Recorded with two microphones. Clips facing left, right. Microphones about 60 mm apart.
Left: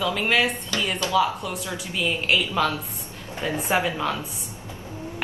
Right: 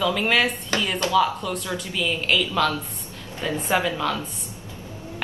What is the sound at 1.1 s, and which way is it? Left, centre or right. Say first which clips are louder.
A woman's voice: right 2 dB; centre.